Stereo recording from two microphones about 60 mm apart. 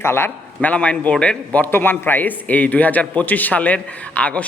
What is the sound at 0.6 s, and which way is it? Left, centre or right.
Speech, left.